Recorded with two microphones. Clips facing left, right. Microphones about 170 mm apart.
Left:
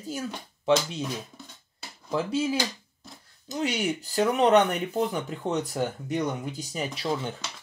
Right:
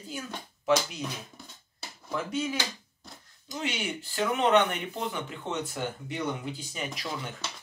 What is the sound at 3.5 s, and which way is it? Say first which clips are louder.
Speech: left 6 dB; 40° left (ahead or behind).